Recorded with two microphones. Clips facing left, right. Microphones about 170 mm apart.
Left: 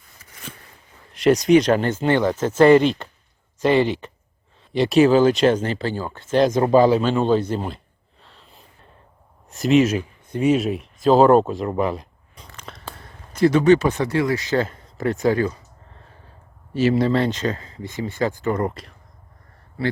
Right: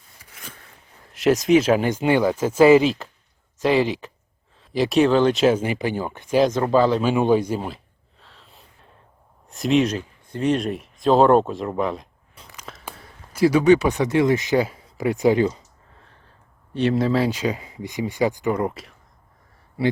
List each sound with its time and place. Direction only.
1.1 s speech: centre (ahead or behind); by 6.3 s 15° right (ahead or behind)
6.5 s speech: 15° left (ahead or behind)
7.0 s speech: 10° right (ahead or behind)
8.2 s a sound: centre (ahead or behind)
9.5 s speech: centre (ahead or behind)
10.0 s a sound: 15° left (ahead or behind)
10.5 s speech: 5° left (ahead or behind)
12.5 s a sound: 5° right (ahead or behind)
13.0 s speech: 10° right (ahead or behind)
16.7 s speech: centre (ahead or behind)